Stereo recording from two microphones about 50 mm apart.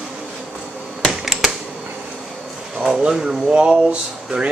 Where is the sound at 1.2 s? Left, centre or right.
Centre.